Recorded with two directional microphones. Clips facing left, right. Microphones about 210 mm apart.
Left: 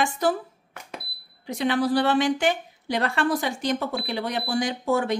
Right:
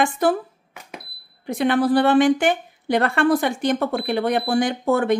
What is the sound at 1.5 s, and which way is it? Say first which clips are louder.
A woman's voice: right 5 dB; 55° right (ahead or behind).